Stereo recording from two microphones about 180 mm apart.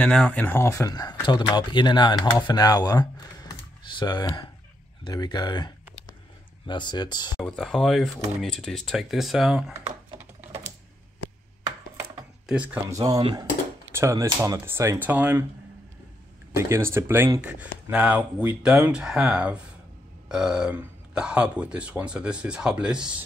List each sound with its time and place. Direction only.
0.0 s speech: 5° left (ahead or behind); by 5.7 s 25° left (ahead or behind)
6.7 s speech: 25° left (ahead or behind)
7.3 s a man's voice: centre (ahead or behind)
12.4 s speech: 5° right (ahead or behind)
12.9 s speech: 20° right (ahead or behind)
13.9 s speech: 15° right (ahead or behind)
16.5 s a man's voice: 15° right (ahead or behind)